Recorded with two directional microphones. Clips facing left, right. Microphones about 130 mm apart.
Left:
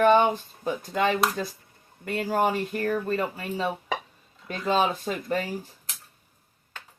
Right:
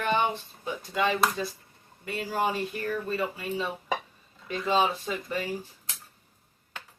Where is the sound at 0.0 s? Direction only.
45° left (ahead or behind).